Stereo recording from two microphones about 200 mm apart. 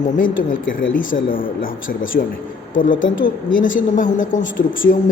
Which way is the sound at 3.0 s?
70° left (ahead or behind).